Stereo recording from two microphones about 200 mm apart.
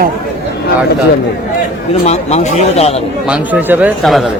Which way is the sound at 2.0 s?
35° left (ahead or behind).